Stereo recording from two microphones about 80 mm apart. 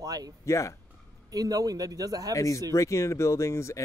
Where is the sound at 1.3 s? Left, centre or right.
Right.